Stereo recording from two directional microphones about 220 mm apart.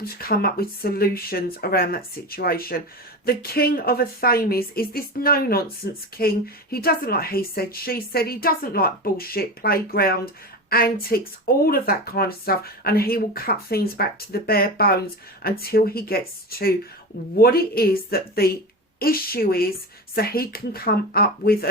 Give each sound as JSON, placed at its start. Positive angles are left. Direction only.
{"t": 0.0, "sound": "a woman's voice", "side_deg": 45}